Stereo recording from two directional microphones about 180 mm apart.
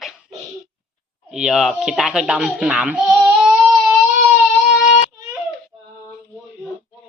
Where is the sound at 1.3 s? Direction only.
5° right (ahead or behind).